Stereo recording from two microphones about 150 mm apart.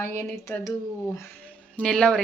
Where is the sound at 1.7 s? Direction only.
5° left (ahead or behind).